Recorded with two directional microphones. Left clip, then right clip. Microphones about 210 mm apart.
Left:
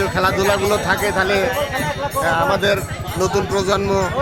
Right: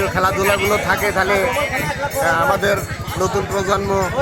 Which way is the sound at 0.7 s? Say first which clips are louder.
Right 1 dB; 5° left (ahead or behind).